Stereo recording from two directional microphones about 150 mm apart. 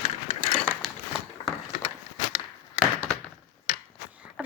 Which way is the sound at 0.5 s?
5° left (ahead or behind).